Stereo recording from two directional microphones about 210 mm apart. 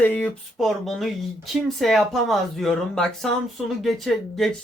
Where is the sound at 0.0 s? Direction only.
10° left (ahead or behind).